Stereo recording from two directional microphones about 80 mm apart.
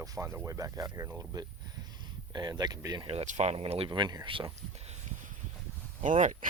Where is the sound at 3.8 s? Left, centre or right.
Right.